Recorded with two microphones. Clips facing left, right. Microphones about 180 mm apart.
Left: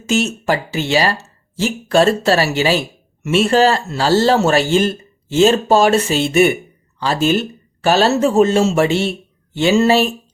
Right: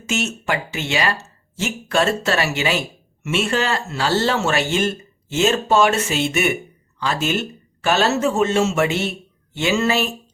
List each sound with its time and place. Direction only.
0.0 s speech: 35° left (ahead or behind)